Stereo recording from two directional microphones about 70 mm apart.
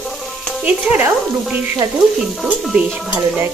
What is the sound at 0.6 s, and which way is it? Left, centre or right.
Speech, right.